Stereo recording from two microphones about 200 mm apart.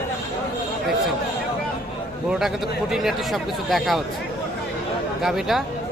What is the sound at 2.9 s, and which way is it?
Speech, centre (ahead or behind).